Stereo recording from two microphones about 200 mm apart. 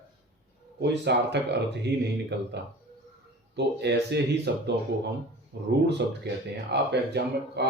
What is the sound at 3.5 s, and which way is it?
Speech, 55° right (ahead or behind).